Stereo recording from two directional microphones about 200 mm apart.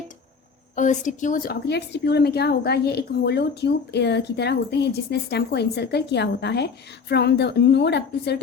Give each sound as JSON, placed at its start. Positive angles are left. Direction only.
{"t": 0.8, "sound": "a woman's voice", "side_deg": 40}